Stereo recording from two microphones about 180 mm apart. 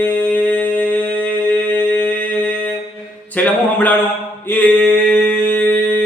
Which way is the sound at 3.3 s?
10° left (ahead or behind).